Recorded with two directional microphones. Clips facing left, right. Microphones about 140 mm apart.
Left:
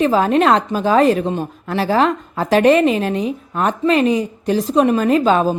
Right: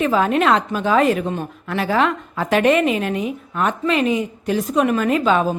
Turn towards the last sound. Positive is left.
turn(degrees=35)  # may be behind; listen again after turning